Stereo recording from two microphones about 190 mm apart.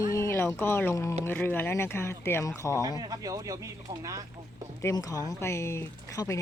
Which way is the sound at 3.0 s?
20° right (ahead or behind).